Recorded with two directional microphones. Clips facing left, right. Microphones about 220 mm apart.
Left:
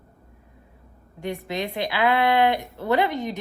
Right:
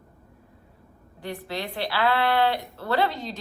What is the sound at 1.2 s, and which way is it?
A woman's voice, 20° left (ahead or behind).